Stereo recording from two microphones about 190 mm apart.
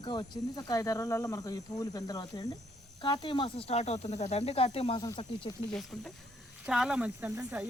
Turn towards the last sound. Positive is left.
turn(degrees=-10)  # may be behind; listen again after turning